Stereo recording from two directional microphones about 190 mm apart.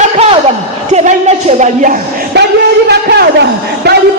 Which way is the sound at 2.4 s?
60° right (ahead or behind).